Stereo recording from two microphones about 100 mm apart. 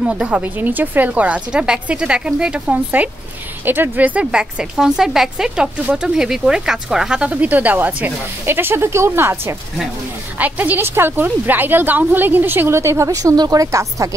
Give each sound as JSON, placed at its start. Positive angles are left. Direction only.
{"t": 0.0, "sound": "a woman's voice", "side_deg": -10}